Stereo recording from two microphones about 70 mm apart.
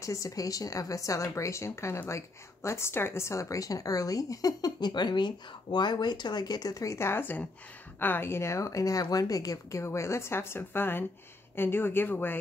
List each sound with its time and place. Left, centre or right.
0.0 s a woman's voice: left